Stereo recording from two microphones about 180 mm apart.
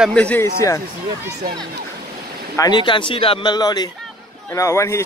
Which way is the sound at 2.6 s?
25° left (ahead or behind).